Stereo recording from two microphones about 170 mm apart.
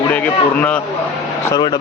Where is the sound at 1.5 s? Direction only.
25° left (ahead or behind).